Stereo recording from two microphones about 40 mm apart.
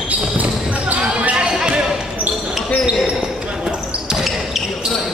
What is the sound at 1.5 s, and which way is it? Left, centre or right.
Basketball bounce, right.